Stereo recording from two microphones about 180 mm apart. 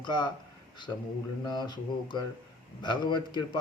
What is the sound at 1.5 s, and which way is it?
Speech, 25° left (ahead or behind).